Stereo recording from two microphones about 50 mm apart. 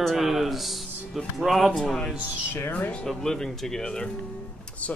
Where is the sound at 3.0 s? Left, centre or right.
Centre.